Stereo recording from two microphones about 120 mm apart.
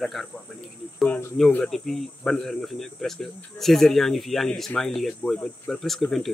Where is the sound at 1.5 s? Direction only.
5° left (ahead or behind).